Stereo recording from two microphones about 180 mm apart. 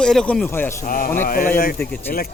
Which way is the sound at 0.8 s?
50° left (ahead or behind).